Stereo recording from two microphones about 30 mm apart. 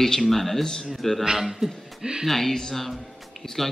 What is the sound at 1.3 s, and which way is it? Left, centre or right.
Speech, centre.